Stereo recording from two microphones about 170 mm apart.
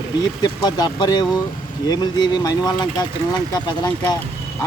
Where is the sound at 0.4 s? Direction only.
25° left (ahead or behind).